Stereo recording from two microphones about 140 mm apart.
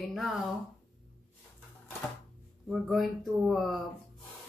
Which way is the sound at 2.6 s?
Centre (ahead or behind).